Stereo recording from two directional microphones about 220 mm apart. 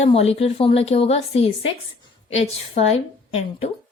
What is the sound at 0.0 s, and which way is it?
A woman's voice, 25° left (ahead or behind).